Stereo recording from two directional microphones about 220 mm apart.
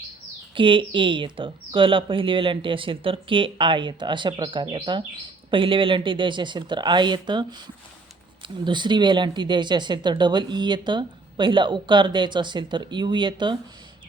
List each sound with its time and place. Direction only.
0.5 s speech: 20° right (ahead or behind)